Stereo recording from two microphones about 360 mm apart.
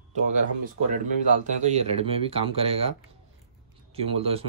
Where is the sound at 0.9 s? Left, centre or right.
Right.